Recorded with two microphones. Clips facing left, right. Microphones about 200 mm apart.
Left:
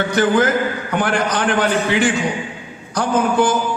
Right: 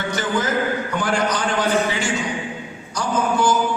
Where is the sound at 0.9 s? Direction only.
60° left (ahead or behind).